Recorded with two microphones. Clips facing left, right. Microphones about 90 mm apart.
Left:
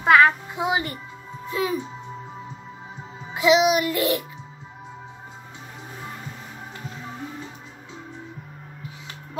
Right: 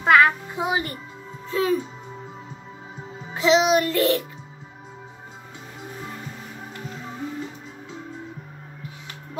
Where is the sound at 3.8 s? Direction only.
15° left (ahead or behind).